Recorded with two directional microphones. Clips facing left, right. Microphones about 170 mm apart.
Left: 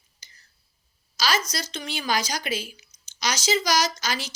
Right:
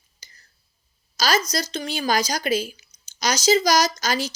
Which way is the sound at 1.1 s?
40° right (ahead or behind).